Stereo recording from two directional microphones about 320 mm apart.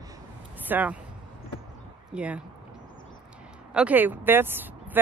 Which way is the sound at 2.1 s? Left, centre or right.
Centre.